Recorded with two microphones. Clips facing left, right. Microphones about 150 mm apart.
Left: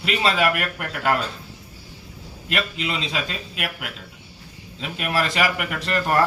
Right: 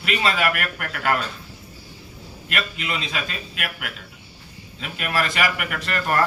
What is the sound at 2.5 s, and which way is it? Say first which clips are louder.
A man's voice: left 2 dB; 25° left (ahead or behind).